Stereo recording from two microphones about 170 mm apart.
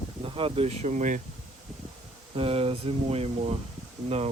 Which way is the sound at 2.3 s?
35° right (ahead or behind).